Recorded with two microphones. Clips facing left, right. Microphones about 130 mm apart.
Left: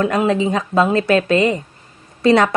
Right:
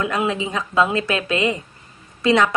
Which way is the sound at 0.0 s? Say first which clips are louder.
Left 6 dB; 40° left (ahead or behind).